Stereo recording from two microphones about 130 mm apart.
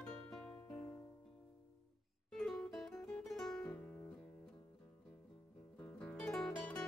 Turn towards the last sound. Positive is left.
turn(degrees=0)  # may be behind; listen again after turning